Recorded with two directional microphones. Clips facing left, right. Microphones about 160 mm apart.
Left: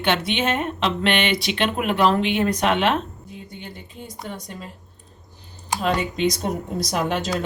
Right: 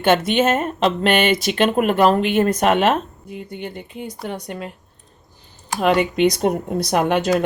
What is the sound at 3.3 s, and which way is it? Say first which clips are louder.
Speech: right 7 dB; 60° right (ahead or behind).